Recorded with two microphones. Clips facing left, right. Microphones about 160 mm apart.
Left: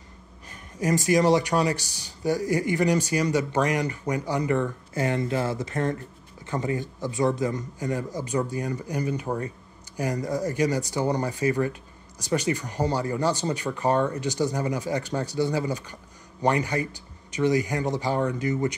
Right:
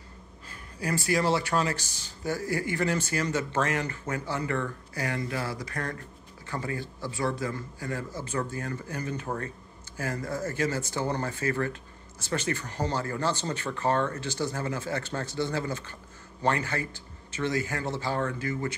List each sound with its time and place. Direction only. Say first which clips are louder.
0.5 s speech: left 6 dB; 20° left (ahead or behind)